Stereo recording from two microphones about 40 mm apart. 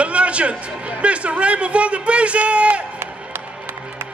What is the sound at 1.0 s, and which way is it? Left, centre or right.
A man's voice, right.